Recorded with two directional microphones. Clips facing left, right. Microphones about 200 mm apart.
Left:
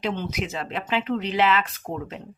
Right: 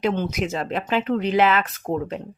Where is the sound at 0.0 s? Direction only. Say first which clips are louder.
Right 5 dB; 45° right (ahead or behind).